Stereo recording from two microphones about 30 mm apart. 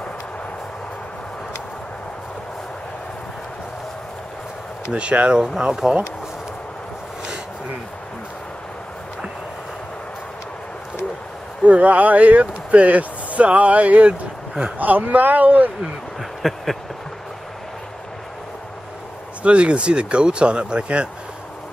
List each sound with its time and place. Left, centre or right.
4.9 s speech: right
5.8 s speech: centre
11.6 s speech: right
14.8 s speech: right
16.2 s a sound: centre
19.4 s speech: right